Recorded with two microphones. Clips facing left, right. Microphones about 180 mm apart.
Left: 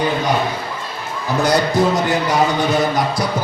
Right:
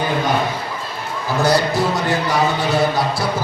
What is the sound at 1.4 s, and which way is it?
Speech, 20° left (ahead or behind).